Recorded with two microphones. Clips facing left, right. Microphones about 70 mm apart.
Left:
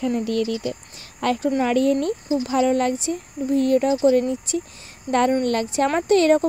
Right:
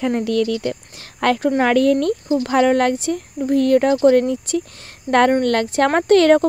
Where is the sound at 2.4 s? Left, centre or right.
Right.